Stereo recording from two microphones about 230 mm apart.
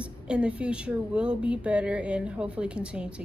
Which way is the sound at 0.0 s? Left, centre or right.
Centre.